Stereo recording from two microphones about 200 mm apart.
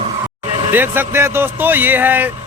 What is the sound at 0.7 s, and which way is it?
Speech, 10° right (ahead or behind).